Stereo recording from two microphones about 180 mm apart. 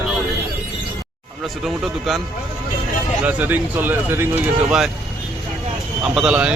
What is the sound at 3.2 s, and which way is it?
Speech, 10° right (ahead or behind).